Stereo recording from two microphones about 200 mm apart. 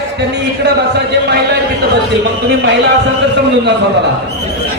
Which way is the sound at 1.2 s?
55° right (ahead or behind).